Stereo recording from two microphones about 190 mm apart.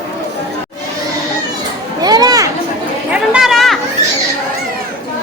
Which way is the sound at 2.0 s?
20° right (ahead or behind).